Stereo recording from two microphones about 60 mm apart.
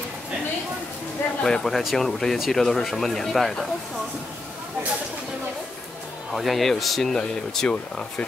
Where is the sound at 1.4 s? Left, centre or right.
Centre.